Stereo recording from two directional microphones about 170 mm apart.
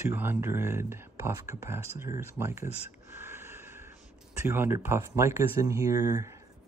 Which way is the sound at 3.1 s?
15° right (ahead or behind).